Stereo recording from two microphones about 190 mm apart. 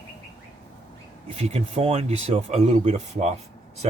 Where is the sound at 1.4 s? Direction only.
30° right (ahead or behind).